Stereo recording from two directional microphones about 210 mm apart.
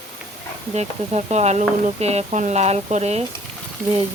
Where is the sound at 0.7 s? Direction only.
30° right (ahead or behind).